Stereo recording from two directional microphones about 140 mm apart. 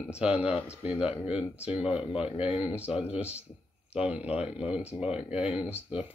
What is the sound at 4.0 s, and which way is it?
Speech, 10° right (ahead or behind).